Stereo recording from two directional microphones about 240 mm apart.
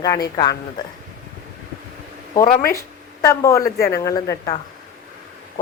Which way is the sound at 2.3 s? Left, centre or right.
Centre.